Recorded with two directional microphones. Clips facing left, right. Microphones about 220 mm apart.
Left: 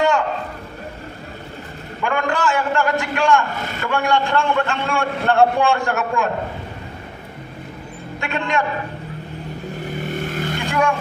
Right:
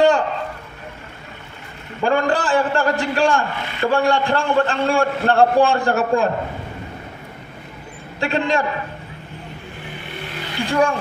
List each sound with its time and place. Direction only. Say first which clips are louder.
2.0 s a man's voice: right 3 dB; 35° right (ahead or behind)
8.2 s a man's voice: right 3 dB; 35° right (ahead or behind)
9.8 s vehicle: left 8 dB; 45° left (ahead or behind)
10.7 s speech: right 3 dB; 35° right (ahead or behind)